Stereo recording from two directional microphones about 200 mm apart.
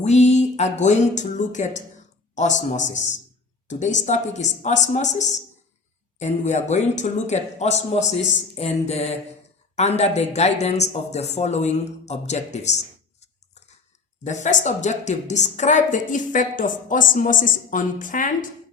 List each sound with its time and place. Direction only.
0.0 s a woman's voice: 35° left (ahead or behind)
14.3 s a woman's voice: 35° left (ahead or behind)